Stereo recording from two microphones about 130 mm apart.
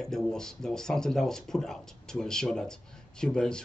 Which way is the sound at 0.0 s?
5° left (ahead or behind).